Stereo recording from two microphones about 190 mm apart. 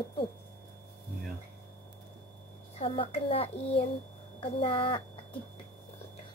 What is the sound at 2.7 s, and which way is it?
A woman's voice, 30° left (ahead or behind).